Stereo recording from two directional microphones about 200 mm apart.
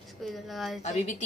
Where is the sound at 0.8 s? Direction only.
35° left (ahead or behind).